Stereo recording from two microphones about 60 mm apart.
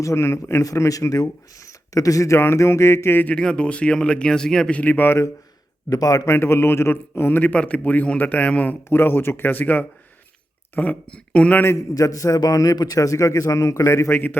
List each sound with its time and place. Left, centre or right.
0.0 s a man's voice: left
0.6 s a man's voice: left
3.3 s speech: centre
4.7 s a man's voice: left
5.0 s a man's voice: left
5.9 s a man's voice: left
6.2 s a man's voice: left
7.5 s a man's voice: left
8.9 s a man's voice: left
11.8 s a man's voice: left